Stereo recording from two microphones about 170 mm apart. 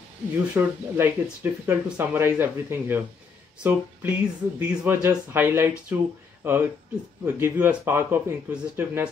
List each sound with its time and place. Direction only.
0.6 s speech: 10° right (ahead or behind)